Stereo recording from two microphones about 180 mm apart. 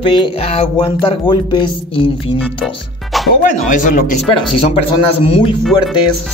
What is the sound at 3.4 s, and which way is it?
Speech, 45° left (ahead or behind).